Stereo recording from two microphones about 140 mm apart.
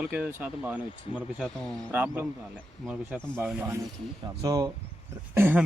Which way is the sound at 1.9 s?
10° right (ahead or behind).